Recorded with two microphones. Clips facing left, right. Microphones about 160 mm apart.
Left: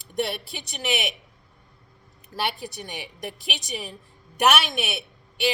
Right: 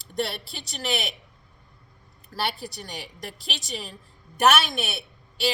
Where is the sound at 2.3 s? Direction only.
20° left (ahead or behind).